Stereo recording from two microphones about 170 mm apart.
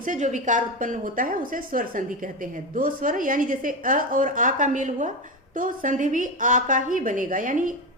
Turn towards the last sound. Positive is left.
turn(degrees=-50)  # may be behind; listen again after turning